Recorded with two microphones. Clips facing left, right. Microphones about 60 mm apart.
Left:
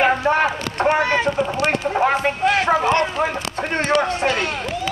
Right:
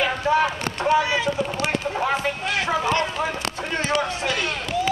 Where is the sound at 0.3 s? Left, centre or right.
Left.